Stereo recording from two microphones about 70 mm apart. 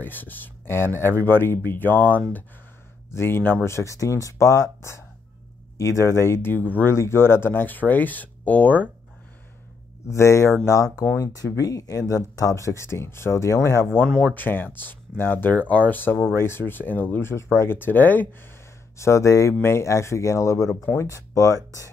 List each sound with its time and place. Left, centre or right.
0.0 s speech: left
3.6 s speech: left
10.0 s speech: left
11.1 s speech: left
14.2 s speech: left
18.9 s speech: left